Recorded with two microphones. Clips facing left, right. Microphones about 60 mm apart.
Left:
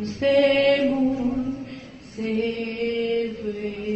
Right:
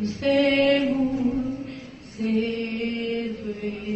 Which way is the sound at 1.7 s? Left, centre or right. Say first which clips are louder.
Left 2 dB; left.